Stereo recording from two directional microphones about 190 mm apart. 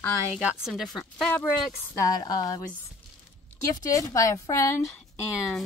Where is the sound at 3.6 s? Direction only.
20° left (ahead or behind).